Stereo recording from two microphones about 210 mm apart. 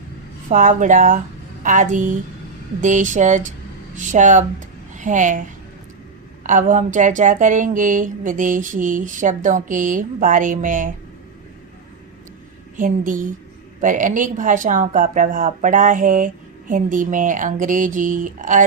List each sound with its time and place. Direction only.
0.5 s a woman's voice: 40° right (ahead or behind)
12.7 s speech: 40° right (ahead or behind)